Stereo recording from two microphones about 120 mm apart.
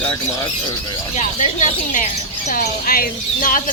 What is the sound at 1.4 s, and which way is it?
Speech, 90° left.